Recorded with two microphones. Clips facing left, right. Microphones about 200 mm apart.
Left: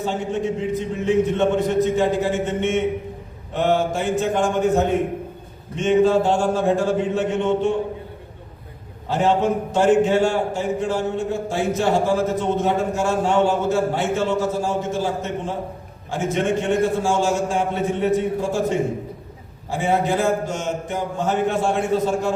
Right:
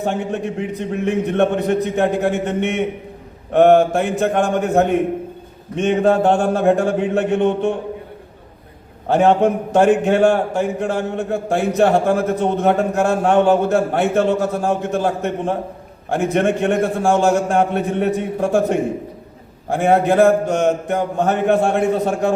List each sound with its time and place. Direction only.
0.0 s a man's voice: 60° right (ahead or behind)
9.0 s a man's voice: 60° right (ahead or behind)